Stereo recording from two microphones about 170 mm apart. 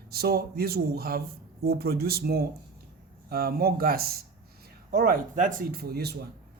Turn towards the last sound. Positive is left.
turn(degrees=-70)  # may be behind; listen again after turning